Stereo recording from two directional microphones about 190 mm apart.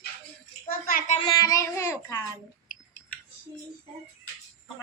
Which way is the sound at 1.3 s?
20° left (ahead or behind).